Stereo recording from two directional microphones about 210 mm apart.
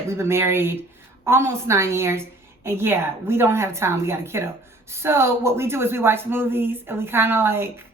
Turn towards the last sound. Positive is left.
turn(degrees=-10)  # may be behind; listen again after turning